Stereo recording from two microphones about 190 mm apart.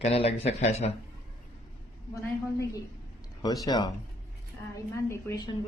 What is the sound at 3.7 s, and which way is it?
Speech, 20° left (ahead or behind).